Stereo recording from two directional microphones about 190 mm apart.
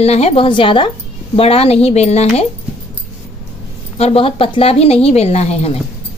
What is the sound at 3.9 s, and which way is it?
A woman's voice, 30° left (ahead or behind).